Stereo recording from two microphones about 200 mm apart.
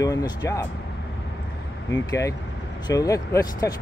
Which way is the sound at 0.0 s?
20° left (ahead or behind).